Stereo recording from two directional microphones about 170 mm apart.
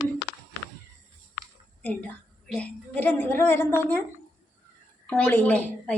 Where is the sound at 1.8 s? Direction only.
10° left (ahead or behind).